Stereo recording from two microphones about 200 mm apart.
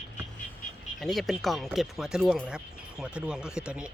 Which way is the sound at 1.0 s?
Centre (ahead or behind).